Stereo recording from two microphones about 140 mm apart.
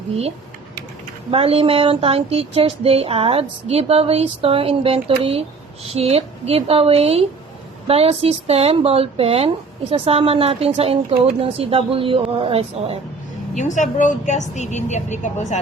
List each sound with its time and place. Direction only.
1.3 s speech: 45° right (ahead or behind)
13.6 s speech: 60° left (ahead or behind)